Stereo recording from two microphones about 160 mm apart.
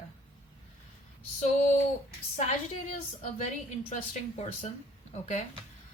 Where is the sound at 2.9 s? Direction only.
40° left (ahead or behind).